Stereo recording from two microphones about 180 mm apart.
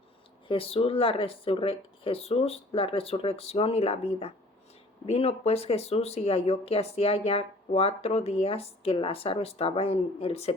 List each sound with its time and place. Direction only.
0.4 s speech: 30° left (ahead or behind)